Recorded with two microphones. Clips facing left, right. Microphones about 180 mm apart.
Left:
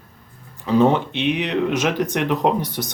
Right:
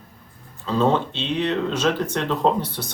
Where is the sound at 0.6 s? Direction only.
15° left (ahead or behind).